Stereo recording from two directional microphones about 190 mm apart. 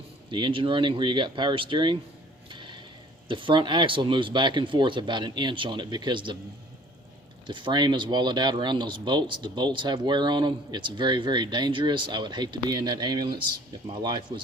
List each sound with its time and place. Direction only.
0.3 s speech: 25° right (ahead or behind)
2.5 s a sound: 25° right (ahead or behind)
3.2 s speech: 25° right (ahead or behind)
7.4 s speech: 25° right (ahead or behind)